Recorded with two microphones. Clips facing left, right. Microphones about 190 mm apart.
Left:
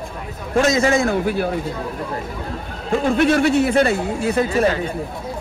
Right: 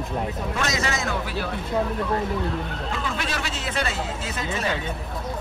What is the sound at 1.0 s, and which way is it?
Speech, 50° left (ahead or behind).